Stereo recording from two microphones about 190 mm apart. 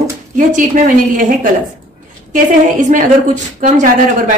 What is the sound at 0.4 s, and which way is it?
A woman's voice, 45° right (ahead or behind).